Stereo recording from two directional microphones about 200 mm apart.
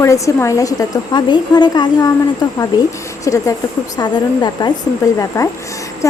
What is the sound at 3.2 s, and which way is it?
A woman's voice, 15° left (ahead or behind).